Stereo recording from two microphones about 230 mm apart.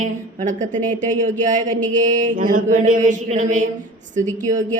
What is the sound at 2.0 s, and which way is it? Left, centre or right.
Mantra, right.